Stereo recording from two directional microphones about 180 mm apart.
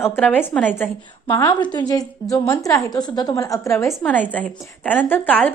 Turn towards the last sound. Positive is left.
turn(degrees=10)  # may be behind; listen again after turning